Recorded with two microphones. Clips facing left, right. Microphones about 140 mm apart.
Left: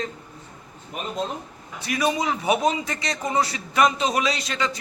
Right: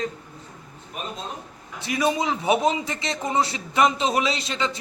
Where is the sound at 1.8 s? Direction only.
25° right (ahead or behind).